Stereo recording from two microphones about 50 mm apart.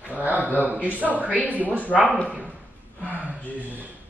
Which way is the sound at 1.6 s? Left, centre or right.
Left.